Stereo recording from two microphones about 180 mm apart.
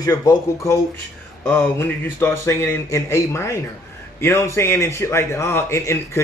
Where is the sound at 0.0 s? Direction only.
20° left (ahead or behind).